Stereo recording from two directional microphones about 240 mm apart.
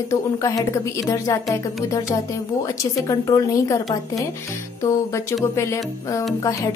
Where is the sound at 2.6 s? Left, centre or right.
Centre.